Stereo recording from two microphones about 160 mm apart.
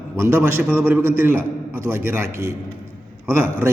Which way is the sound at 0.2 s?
15° right (ahead or behind).